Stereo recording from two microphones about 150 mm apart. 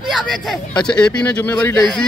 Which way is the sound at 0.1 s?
Centre (ahead or behind).